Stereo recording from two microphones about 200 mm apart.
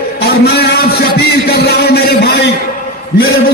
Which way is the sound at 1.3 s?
55° left (ahead or behind).